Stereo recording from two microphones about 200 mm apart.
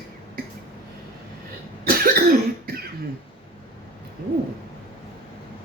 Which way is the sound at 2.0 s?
50° right (ahead or behind).